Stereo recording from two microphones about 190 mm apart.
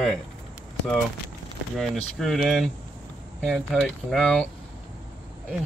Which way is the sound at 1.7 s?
Centre (ahead or behind).